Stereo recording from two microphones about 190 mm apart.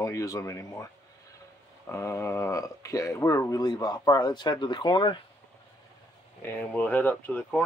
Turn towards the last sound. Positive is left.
turn(degrees=10)  # may be behind; listen again after turning